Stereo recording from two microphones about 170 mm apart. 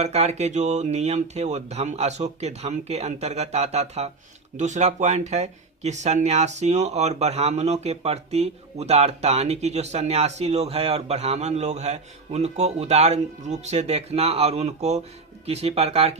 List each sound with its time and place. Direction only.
0.0 s speech: 40° right (ahead or behind)